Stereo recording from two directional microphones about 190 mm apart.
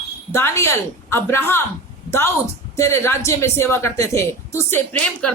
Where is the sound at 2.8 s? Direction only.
15° left (ahead or behind).